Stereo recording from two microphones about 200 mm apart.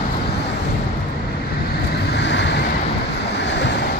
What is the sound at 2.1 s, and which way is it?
Vehicle, 60° left (ahead or behind).